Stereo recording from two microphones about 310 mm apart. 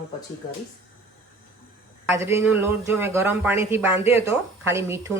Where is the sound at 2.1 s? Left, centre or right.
Centre.